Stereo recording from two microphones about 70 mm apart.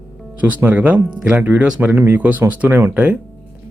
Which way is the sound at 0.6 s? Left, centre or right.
Right.